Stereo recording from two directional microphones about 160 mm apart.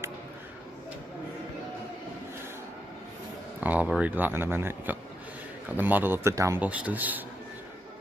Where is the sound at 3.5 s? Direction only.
10° right (ahead or behind).